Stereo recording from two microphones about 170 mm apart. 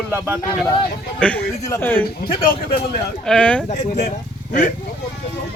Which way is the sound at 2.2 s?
60° left (ahead or behind).